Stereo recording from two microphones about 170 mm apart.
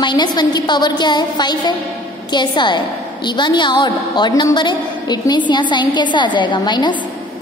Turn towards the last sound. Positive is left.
turn(degrees=25)  # may be behind; listen again after turning